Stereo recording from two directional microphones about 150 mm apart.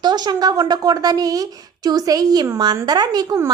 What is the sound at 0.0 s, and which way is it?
A woman's voice, 30° right (ahead or behind).